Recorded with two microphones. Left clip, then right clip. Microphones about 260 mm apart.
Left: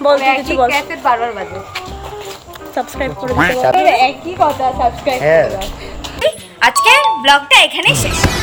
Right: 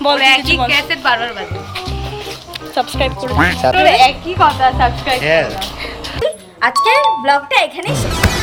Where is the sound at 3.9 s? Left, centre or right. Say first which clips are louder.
Right 2 dB; left.